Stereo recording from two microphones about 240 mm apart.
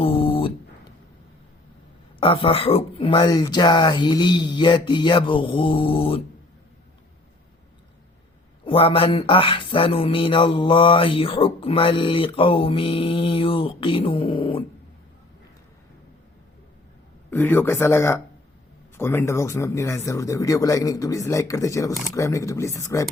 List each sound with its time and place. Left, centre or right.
0.0 s a sound: left
2.2 s speech: left
8.6 s speech: left
17.3 s speech: centre